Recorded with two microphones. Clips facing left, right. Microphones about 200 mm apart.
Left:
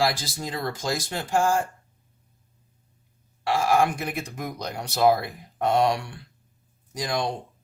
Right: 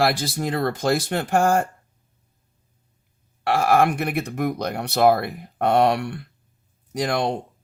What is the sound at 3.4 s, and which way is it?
Speech, 60° right (ahead or behind).